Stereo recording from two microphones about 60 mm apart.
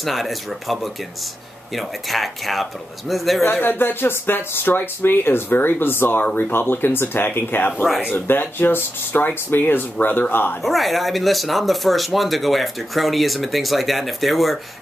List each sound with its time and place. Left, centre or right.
0.0 s speech: centre
3.6 s speech: left
10.6 s speech: centre